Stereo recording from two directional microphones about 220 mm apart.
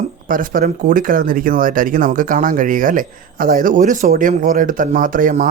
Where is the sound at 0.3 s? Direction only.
40° right (ahead or behind).